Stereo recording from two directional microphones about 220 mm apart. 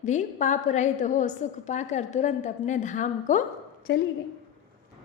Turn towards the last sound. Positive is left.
turn(degrees=45)  # may be behind; listen again after turning